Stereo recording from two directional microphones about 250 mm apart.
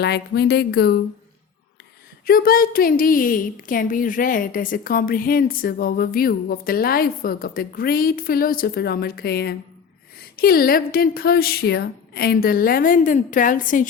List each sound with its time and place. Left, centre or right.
0.0 s a woman's voice: left
2.2 s a woman's voice: left